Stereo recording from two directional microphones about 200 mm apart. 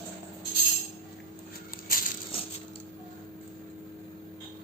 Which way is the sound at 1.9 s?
45° left (ahead or behind).